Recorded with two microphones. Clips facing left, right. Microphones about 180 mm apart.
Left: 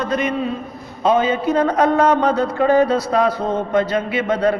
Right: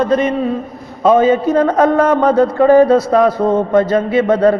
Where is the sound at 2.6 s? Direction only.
40° right (ahead or behind).